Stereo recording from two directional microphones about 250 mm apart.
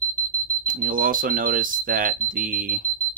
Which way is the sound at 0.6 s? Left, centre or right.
Right.